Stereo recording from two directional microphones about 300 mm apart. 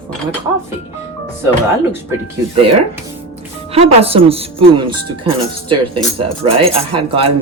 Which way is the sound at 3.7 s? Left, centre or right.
Centre.